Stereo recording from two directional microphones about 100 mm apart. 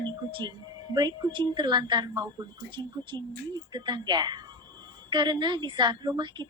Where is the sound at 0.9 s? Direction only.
45° right (ahead or behind).